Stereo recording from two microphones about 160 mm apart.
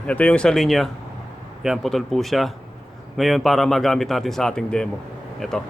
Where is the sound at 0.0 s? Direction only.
5° left (ahead or behind).